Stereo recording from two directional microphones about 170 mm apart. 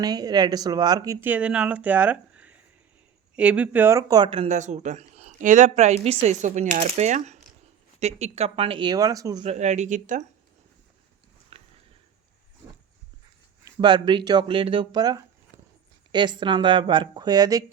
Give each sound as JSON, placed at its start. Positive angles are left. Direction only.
{"t": 0.0, "sound": "speech", "side_deg": -25}
{"t": 9.4, "sound": "speech", "side_deg": -40}
{"t": 11.5, "sound": "sniff", "side_deg": -35}
{"t": 13.7, "sound": "speech", "side_deg": -25}
{"t": 15.5, "sound": "a sound", "side_deg": -50}
{"t": 16.1, "sound": "speech", "side_deg": -25}